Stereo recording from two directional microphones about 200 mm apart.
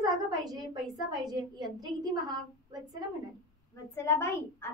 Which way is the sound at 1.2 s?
20° right (ahead or behind).